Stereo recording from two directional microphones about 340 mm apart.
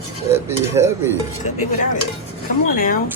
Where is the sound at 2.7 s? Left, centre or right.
Left.